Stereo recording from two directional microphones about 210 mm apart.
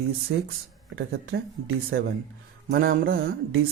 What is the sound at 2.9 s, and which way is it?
Speech, 45° right (ahead or behind).